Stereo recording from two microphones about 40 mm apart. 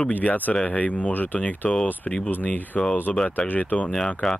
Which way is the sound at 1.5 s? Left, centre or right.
Left.